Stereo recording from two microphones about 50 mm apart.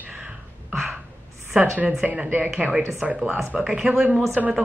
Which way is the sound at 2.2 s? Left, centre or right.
Right.